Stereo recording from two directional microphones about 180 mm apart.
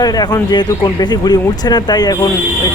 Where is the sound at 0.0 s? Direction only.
20° left (ahead or behind).